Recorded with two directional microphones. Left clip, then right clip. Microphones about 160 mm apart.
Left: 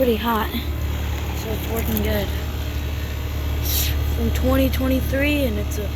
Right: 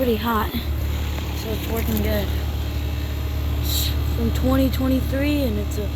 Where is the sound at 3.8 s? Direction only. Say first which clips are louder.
Even; 30° right (ahead or behind).